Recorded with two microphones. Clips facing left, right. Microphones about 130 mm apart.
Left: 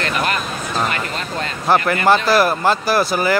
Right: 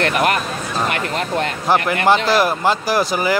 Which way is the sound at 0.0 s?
65° right (ahead or behind).